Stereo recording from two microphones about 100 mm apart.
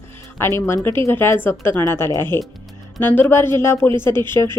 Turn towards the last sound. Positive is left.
turn(degrees=25)  # may be behind; listen again after turning